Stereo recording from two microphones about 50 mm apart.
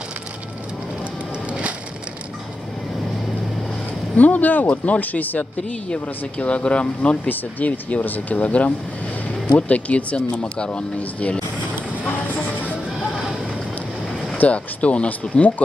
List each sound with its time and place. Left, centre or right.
4.2 s speech: left
7.2 s speech: left
14.4 s speech: left